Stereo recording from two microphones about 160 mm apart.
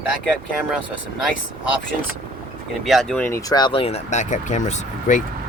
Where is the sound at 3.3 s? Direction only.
20° left (ahead or behind); by 5.2 s 50° left (ahead or behind).